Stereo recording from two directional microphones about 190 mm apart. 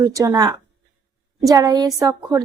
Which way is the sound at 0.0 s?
15° right (ahead or behind).